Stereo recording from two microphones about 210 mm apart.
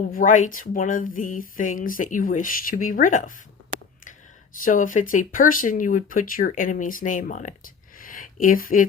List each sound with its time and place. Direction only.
0.1 s speech: 40° left (ahead or behind)
4.6 s speech: 40° left (ahead or behind)
7.9 s a sound: 40° left (ahead or behind)